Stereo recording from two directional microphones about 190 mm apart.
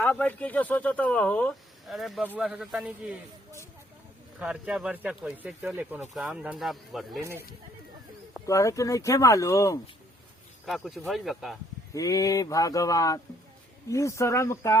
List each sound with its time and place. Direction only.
0.0 s speech: 5° left (ahead or behind)
4.4 s speech: 5° right (ahead or behind)
7.2 s speech: 15° right (ahead or behind)
8.4 s speech: 15° left (ahead or behind)
10.7 s speech: centre (ahead or behind)
11.9 s speech: 20° left (ahead or behind)